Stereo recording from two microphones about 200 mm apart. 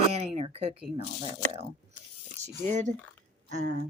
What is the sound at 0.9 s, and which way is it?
Speech, 30° right (ahead or behind).